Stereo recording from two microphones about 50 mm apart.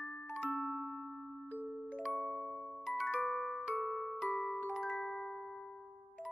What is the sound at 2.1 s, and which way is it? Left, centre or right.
Music, centre.